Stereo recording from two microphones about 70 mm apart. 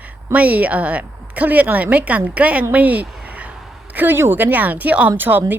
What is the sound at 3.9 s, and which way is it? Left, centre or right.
Speech, right.